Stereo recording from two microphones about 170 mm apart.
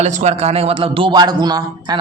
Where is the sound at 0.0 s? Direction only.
45° right (ahead or behind).